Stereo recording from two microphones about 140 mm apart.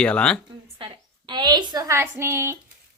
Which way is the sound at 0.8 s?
35° right (ahead or behind).